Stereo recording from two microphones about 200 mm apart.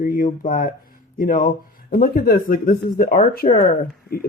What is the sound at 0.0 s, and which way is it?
Speech, 45° left (ahead or behind).